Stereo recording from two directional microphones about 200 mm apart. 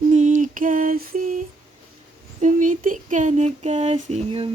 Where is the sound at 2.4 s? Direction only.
40° right (ahead or behind).